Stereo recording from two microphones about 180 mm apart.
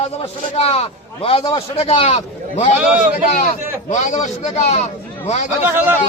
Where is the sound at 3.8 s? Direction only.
40° left (ahead or behind).